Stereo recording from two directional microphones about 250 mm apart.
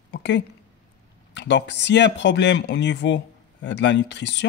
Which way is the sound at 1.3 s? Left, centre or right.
Left.